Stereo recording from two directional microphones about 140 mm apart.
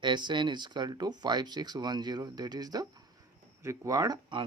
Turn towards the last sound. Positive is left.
turn(degrees=-25)  # may be behind; listen again after turning